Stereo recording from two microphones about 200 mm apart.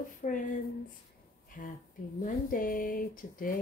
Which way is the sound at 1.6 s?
40° left (ahead or behind).